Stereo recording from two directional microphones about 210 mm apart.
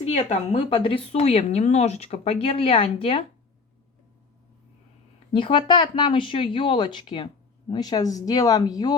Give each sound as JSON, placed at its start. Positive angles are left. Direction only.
{"t": 0.0, "sound": "speech", "side_deg": 25}
{"t": 5.3, "sound": "speech", "side_deg": 25}